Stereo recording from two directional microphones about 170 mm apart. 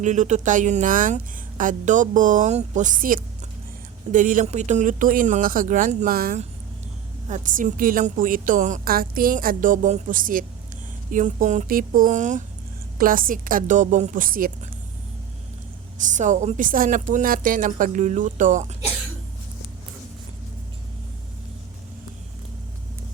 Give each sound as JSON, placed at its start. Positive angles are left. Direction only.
{"t": 0.0, "sound": "speech", "side_deg": -45}
{"t": 7.3, "sound": "speech", "side_deg": -50}
{"t": 16.0, "sound": "speech", "side_deg": -45}